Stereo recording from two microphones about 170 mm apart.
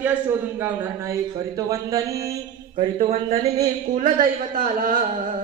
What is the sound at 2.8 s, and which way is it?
Mantra, 35° right (ahead or behind).